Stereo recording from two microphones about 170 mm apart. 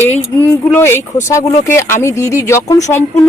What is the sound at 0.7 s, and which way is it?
A woman's voice, 15° left (ahead or behind).